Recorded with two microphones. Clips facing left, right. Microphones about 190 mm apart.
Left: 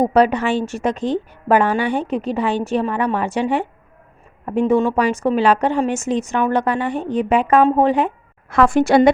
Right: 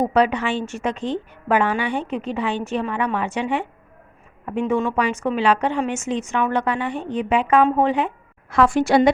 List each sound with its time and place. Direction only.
0.0 s a woman's voice: 40° left (ahead or behind)